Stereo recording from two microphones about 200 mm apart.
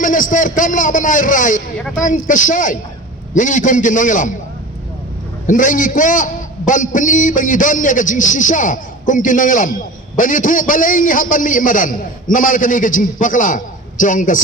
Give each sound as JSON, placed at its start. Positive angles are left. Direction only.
{"t": 0.0, "sound": "a man's voice", "side_deg": 40}
{"t": 5.5, "sound": "a man's voice", "side_deg": 40}